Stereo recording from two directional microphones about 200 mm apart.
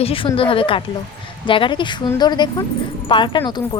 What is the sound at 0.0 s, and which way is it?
A woman's voice, 25° left (ahead or behind).